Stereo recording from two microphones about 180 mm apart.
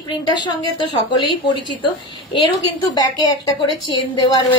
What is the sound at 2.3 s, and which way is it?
A woman's voice, 25° left (ahead or behind).